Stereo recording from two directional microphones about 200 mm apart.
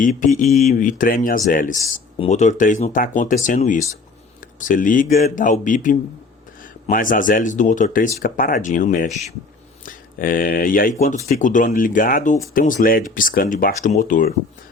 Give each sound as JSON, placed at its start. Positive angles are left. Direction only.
{"t": 0.2, "sound": "speech", "side_deg": 40}